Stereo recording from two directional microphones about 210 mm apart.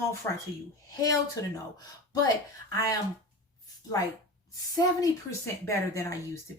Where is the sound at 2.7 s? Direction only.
15° left (ahead or behind).